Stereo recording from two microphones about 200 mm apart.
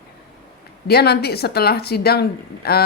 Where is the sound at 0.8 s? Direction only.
55° left (ahead or behind).